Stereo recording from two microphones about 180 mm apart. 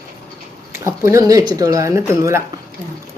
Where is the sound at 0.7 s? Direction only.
15° right (ahead or behind).